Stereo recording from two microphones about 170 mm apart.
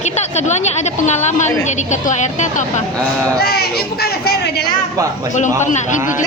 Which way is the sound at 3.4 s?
65° left (ahead or behind).